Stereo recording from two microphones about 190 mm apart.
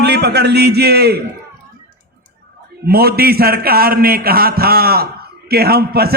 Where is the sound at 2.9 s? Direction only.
55° right (ahead or behind).